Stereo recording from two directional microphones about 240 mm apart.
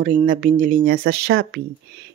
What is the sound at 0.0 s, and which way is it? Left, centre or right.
A woman's voice, right.